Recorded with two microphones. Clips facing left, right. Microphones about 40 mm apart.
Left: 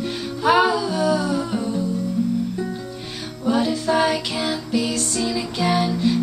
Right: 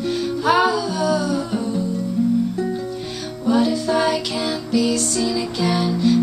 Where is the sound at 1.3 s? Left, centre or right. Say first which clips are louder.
Right 1 dB; centre.